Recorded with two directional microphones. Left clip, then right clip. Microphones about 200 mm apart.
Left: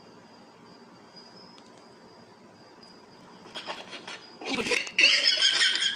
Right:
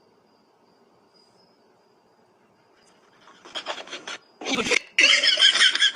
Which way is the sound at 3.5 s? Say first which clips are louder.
Right 5 dB; 45° right (ahead or behind).